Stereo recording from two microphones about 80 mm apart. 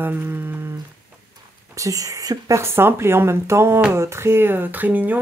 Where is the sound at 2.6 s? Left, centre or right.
Right.